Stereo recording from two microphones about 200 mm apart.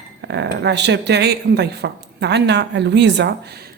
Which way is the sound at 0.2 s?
60° right (ahead or behind).